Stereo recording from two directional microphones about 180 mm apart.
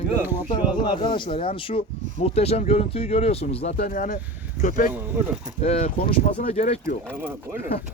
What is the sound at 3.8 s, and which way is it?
Speech, 50° left (ahead or behind).